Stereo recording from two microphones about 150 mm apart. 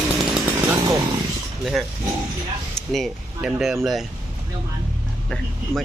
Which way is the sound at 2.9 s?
5° right (ahead or behind).